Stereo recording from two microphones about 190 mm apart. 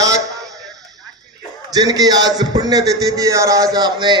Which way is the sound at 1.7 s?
20° right (ahead or behind).